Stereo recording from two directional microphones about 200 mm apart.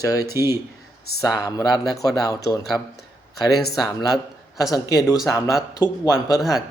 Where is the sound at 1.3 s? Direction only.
20° left (ahead or behind).